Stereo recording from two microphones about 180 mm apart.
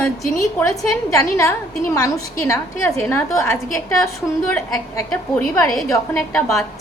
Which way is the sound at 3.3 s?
15° left (ahead or behind).